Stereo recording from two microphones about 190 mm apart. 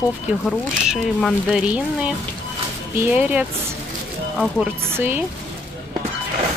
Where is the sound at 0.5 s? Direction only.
5° left (ahead or behind).